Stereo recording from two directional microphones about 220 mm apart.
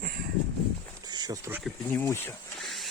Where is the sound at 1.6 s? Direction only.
10° left (ahead or behind).